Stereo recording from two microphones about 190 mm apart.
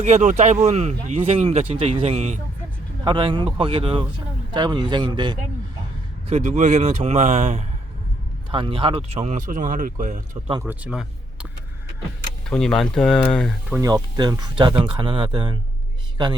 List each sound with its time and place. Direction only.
0.0 s speech: 35° right (ahead or behind)
6.2 s speech: 35° right (ahead or behind)
8.4 s speech: 25° right (ahead or behind); by 10.2 s 45° right (ahead or behind)
10.5 s speech: 10° right (ahead or behind)
12.5 s speech: 5° left (ahead or behind)
13.7 s speech: 10° right (ahead or behind)
13.9 s speech: 20° right (ahead or behind)